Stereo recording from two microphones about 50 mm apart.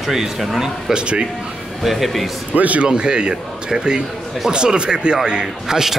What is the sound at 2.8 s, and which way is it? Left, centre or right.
Speech, centre.